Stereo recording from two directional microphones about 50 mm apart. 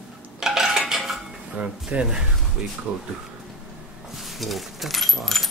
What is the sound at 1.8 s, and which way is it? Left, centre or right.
Speech, centre.